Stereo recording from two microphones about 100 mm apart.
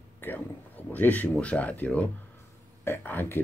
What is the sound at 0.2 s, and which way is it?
Speech, 20° left (ahead or behind).